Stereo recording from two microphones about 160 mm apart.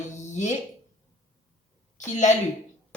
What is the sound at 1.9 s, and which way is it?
Speech, 50° left (ahead or behind).